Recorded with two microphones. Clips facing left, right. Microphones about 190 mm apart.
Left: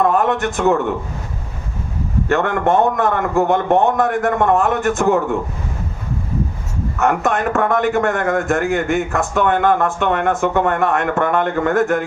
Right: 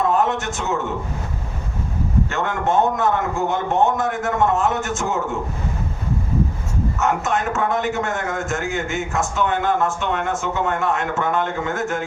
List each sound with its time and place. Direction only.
0.0 s a man's voice: 55° left (ahead or behind)
2.3 s a man's voice: 55° left (ahead or behind)
7.0 s a man's voice: 55° left (ahead or behind)